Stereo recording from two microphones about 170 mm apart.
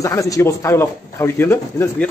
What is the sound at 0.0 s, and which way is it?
Speech, 20° left (ahead or behind).